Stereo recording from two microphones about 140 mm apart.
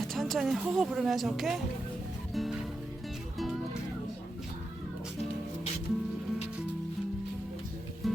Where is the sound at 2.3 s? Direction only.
Centre (ahead or behind).